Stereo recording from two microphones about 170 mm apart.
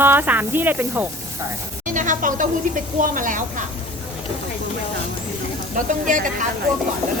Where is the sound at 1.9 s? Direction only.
50° right (ahead or behind).